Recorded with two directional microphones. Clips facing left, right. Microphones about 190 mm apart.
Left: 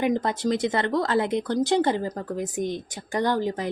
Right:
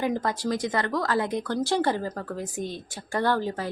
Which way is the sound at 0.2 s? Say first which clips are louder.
Left 3 dB; 20° left (ahead or behind).